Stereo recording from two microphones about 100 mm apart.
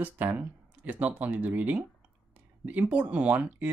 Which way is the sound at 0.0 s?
20° right (ahead or behind).